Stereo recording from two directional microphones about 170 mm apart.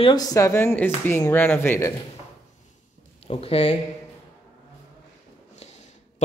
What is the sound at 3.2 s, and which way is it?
Speech, 35° left (ahead or behind).